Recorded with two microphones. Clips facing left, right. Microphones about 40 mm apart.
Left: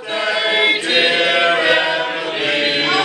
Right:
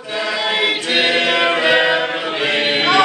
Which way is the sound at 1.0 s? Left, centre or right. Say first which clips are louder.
Even; centre.